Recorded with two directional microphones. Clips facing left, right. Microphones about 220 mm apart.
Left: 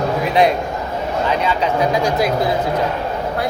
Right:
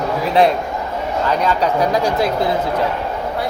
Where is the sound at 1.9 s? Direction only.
30° right (ahead or behind).